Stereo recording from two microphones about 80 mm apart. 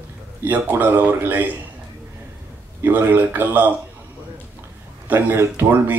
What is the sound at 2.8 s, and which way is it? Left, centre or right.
Speech, right.